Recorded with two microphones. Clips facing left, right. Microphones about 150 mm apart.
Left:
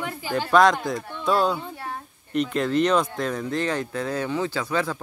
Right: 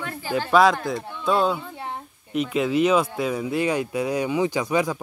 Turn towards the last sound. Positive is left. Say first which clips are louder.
# right 3 dB
turn(degrees=-15)  # may be behind; listen again after turning